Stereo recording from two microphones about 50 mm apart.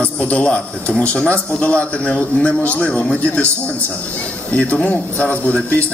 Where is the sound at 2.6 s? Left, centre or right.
Left.